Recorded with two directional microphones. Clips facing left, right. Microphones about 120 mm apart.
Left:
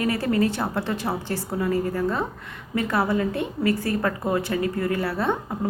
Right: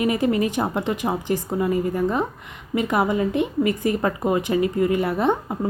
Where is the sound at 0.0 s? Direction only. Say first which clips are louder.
Right 2 dB; 15° right (ahead or behind).